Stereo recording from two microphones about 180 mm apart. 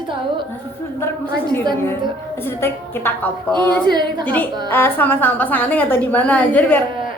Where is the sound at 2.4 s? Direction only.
10° left (ahead or behind).